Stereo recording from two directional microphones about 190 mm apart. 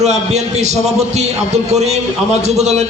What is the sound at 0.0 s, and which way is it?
A man's voice, 35° right (ahead or behind).